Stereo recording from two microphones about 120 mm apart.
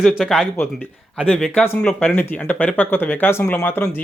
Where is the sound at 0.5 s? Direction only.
15° left (ahead or behind).